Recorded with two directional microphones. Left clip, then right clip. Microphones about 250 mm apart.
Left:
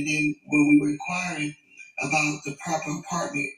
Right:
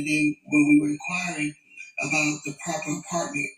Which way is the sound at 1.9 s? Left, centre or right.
Left.